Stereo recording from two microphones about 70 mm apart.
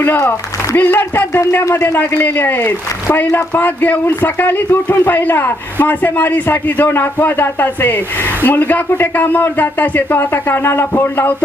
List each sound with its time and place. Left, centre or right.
0.0 s speech: left